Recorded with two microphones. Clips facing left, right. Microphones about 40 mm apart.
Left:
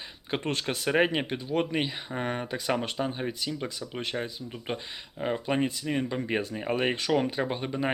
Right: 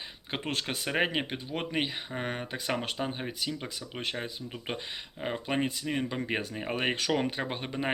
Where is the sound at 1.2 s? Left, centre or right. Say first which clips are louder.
Left 6 dB; centre.